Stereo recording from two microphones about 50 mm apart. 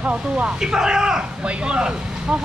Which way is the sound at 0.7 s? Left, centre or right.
Centre.